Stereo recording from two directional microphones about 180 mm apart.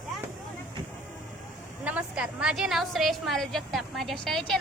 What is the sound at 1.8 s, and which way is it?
A woman's voice, 5° right (ahead or behind).